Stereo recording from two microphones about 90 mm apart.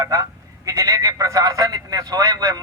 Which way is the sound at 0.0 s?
40° right (ahead or behind).